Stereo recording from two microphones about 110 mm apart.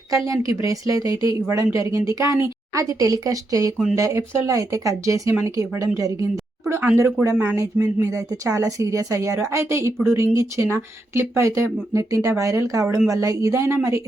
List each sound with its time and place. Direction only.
0.1 s speech: 30° right (ahead or behind)